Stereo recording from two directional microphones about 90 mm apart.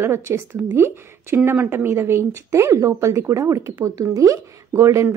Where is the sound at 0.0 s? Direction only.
30° right (ahead or behind).